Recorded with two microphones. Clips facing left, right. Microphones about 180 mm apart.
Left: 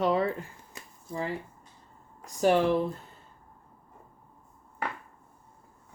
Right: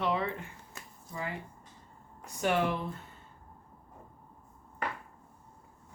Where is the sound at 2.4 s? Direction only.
35° left (ahead or behind).